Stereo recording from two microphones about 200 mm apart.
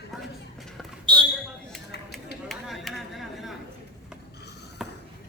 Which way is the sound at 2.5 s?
Centre (ahead or behind).